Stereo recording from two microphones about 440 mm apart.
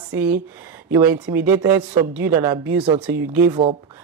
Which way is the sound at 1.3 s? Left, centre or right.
Centre.